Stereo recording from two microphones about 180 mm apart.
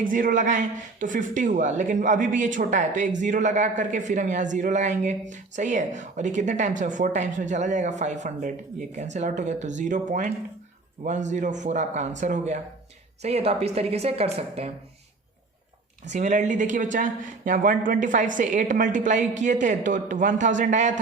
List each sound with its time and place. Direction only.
0.0 s a woman's voice: 45° right (ahead or behind)
16.0 s speech: 40° right (ahead or behind)